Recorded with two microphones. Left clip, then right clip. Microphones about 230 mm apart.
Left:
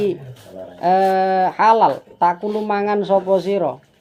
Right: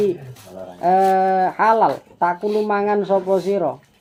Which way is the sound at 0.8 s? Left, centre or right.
Centre.